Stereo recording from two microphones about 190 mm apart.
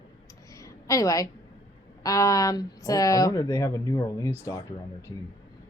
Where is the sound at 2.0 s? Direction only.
15° left (ahead or behind).